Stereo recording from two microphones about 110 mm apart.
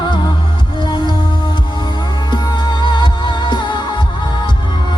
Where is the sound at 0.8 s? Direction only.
45° left (ahead or behind).